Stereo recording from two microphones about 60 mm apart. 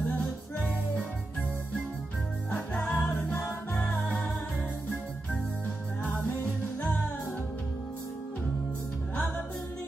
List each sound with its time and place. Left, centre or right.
2.8 s music: left
3.8 s music: centre